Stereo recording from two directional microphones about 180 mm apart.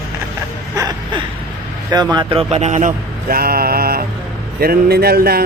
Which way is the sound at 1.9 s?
20° right (ahead or behind).